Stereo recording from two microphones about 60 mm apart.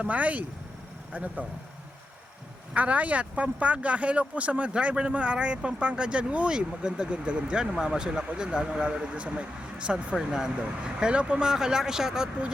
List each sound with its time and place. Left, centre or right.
0.0 s speech: right
2.7 s speech: right